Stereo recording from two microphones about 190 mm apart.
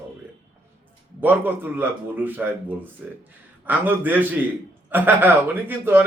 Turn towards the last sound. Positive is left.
turn(degrees=-10)  # may be behind; listen again after turning